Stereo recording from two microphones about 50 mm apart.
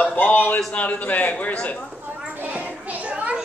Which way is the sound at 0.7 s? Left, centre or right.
Left.